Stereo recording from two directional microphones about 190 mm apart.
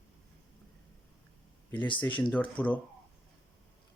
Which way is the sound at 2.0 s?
10° left (ahead or behind).